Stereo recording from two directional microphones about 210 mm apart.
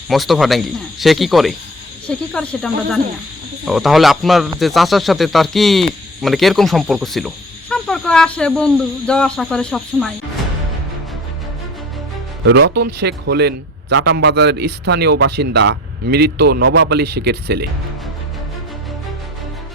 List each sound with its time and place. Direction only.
0.1 s speech: centre (ahead or behind)
12.5 s speech: 50° right (ahead or behind)